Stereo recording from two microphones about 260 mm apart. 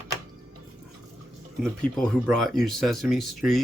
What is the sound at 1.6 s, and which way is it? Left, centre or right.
Speech, centre.